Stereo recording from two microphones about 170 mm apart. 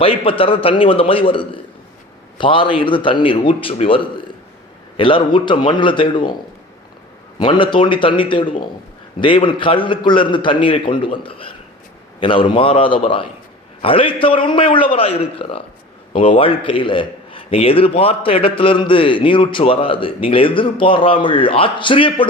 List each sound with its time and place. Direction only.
0.0 s a man's voice: 35° left (ahead or behind)
7.3 s a man's voice: 30° left (ahead or behind)